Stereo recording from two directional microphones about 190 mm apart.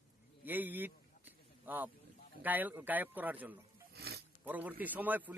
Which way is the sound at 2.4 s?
10° right (ahead or behind).